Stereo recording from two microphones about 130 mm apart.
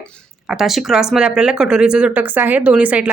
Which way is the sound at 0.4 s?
Centre (ahead or behind).